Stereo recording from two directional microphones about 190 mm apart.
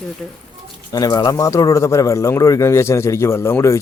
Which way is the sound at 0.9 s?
20° left (ahead or behind).